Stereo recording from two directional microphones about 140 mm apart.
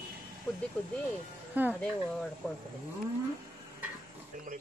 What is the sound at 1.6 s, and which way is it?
Speech, 10° right (ahead or behind).